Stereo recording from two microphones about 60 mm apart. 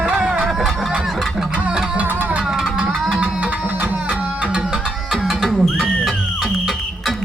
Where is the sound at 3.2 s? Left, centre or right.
Right.